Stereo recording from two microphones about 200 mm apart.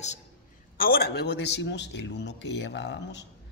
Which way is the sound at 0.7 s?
50° left (ahead or behind).